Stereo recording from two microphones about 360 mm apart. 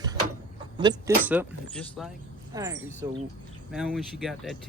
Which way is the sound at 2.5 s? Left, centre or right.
Centre.